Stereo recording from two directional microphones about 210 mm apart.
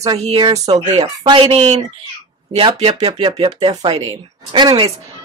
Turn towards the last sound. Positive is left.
turn(degrees=-25)  # may be behind; listen again after turning